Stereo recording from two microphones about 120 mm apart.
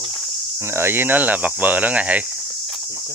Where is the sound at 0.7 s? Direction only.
20° right (ahead or behind).